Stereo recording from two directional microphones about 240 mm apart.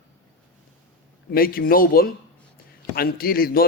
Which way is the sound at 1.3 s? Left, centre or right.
Left.